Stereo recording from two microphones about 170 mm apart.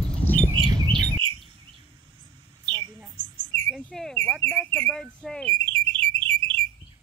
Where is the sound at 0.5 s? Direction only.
25° right (ahead or behind).